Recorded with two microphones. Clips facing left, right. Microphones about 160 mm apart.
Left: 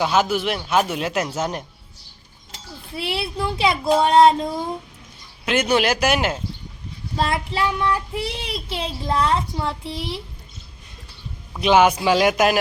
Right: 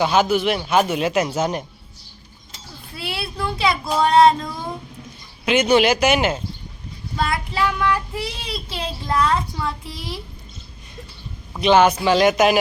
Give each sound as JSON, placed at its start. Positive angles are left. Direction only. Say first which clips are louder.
{"t": 0.0, "sound": "speech", "louder": "right 2 dB", "side_deg": 0}
{"t": 2.9, "sound": "speech", "louder": "left 3 dB", "side_deg": 25}
{"t": 5.5, "sound": "speech", "louder": "right 3 dB", "side_deg": 0}
{"t": 7.2, "sound": "speech", "louder": "even", "side_deg": 25}
{"t": 11.6, "sound": "speech", "louder": "right 1 dB", "side_deg": 5}